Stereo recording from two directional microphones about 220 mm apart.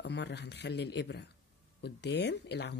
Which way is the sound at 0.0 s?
50° left (ahead or behind).